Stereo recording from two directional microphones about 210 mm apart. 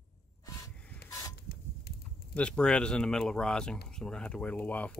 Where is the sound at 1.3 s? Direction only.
50° left (ahead or behind).